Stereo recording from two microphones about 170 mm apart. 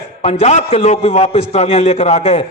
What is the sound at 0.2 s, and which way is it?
A man's voice, 40° left (ahead or behind).